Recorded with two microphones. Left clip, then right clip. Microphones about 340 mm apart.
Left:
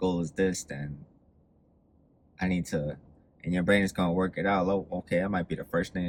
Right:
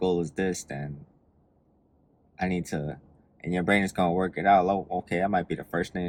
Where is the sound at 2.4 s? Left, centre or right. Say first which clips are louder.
Right 1 dB; centre.